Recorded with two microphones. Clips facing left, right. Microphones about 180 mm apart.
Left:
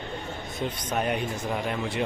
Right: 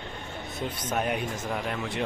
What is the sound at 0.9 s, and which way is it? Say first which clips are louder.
Speech: left 1 dB; 5° right (ahead or behind).